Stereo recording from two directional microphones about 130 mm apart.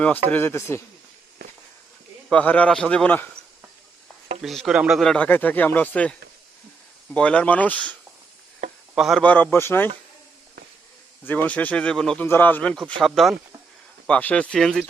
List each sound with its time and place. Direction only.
0.3 s speech: 15° left (ahead or behind)
2.3 s speech: 10° left (ahead or behind)
4.4 s speech: centre (ahead or behind)
9.0 s speech: centre (ahead or behind)
9.2 s speech: 10° left (ahead or behind)
11.3 s speech: 10° left (ahead or behind)
13.0 s speech: centre (ahead or behind)
14.1 s speech: 10° left (ahead or behind)